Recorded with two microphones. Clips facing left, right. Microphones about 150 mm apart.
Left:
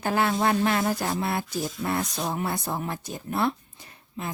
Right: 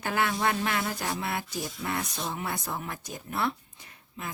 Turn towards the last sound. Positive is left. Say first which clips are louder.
# left 5 dB
turn(degrees=30)  # may be behind; listen again after turning